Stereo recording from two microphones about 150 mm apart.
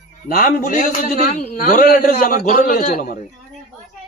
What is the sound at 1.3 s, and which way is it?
A man's voice, 60° left (ahead or behind).